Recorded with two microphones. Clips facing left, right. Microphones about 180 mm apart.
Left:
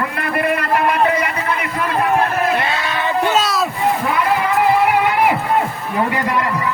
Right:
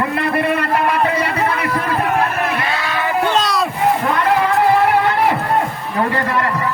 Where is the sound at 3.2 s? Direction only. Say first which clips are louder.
Left 1 dB; 5° left (ahead or behind).